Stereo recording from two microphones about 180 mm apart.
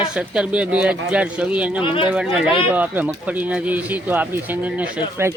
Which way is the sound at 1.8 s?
30° left (ahead or behind).